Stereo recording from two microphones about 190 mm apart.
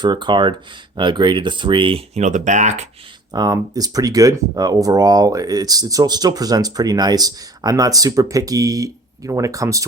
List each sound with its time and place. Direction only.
0.0 s speech: 25° right (ahead or behind); by 2.8 s 40° right (ahead or behind)
3.3 s speech: 20° right (ahead or behind)